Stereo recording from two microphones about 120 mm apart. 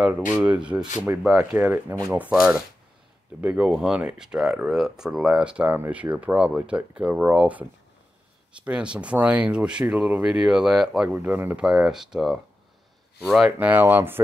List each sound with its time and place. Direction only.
0.3 s speech: 10° right (ahead or behind)